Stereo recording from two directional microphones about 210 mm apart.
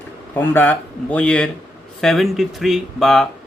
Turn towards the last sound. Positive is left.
turn(degrees=0)  # may be behind; listen again after turning